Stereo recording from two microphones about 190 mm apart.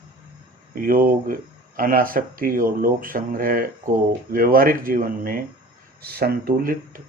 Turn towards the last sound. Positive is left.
turn(degrees=-50)  # may be behind; listen again after turning